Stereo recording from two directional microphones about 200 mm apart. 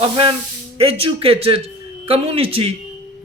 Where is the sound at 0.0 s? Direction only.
25° right (ahead or behind).